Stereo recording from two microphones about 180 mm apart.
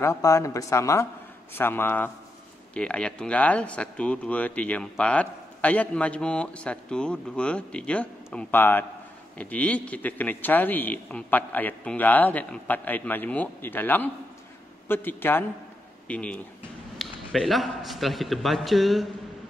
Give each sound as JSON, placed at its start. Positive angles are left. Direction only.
{"t": 0.0, "sound": "a man's voice", "side_deg": 15}